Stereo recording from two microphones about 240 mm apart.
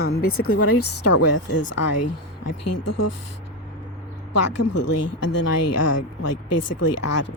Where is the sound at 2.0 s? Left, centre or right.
Left.